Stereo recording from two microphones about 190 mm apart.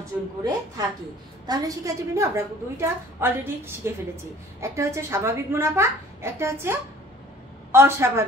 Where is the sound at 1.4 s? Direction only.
20° right (ahead or behind).